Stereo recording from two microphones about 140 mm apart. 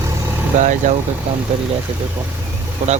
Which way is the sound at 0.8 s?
60° right (ahead or behind).